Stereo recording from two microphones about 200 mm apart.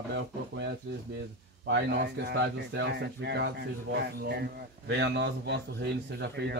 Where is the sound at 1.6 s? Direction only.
60° right (ahead or behind).